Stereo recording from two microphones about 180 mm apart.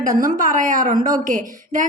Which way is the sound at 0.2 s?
50° right (ahead or behind).